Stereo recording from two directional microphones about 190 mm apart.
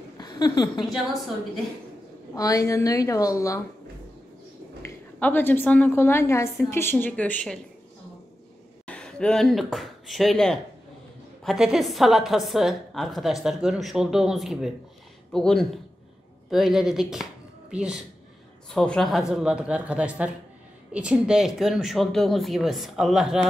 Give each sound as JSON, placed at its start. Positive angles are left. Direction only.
{"t": 0.2, "sound": "a woman's voice", "side_deg": 20}
{"t": 2.3, "sound": "a woman's voice", "side_deg": 15}
{"t": 4.8, "sound": "a woman's voice", "side_deg": 10}
{"t": 8.8, "sound": "a woman's voice", "side_deg": 5}